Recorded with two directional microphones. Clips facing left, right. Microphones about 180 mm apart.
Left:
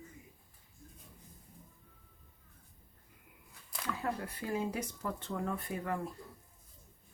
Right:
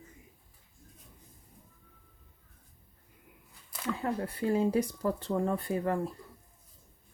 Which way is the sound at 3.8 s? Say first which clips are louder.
Right 5 dB; 25° right (ahead or behind).